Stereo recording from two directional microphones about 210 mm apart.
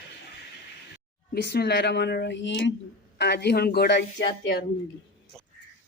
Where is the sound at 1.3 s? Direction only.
50° left (ahead or behind).